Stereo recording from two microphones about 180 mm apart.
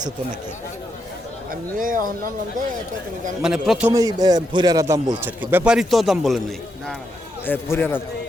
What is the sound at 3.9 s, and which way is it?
A man's voice, 20° right (ahead or behind).